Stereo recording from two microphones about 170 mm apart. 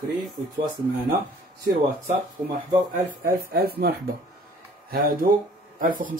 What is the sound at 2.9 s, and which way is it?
Speech, 60° right (ahead or behind).